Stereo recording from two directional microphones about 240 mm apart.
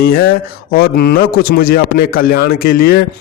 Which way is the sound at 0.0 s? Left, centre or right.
Left.